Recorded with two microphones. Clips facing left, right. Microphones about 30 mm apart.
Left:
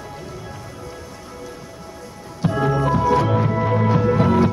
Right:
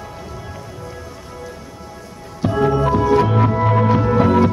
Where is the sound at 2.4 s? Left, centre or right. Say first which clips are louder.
Right 3 dB; centre.